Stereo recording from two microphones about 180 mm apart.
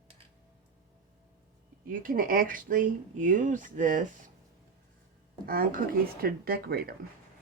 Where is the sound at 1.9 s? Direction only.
50° right (ahead or behind).